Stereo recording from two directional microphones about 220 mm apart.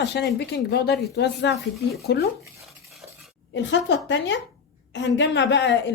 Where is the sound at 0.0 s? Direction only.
50° left (ahead or behind).